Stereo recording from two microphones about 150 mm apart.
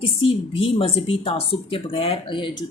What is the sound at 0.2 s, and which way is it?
Speech, 40° left (ahead or behind).